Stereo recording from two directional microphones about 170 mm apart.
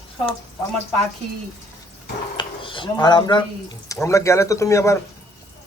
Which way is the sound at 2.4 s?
30° left (ahead or behind).